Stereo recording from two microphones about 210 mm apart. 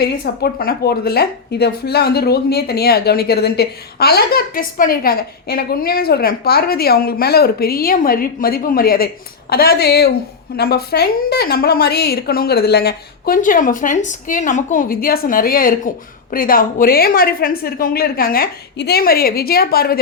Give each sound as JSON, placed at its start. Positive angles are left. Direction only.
{"t": 0.0, "sound": "a woman's voice", "side_deg": 50}